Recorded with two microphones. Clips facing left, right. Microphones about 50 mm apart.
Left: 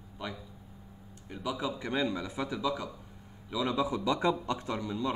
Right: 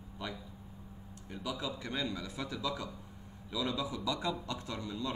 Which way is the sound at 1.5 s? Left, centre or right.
Left.